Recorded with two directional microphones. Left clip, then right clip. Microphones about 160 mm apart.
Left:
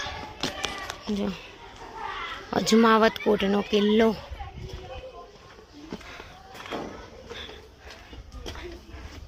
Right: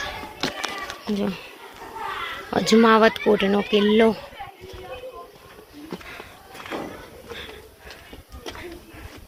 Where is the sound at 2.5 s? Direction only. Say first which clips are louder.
Right 4 dB; 10° left (ahead or behind).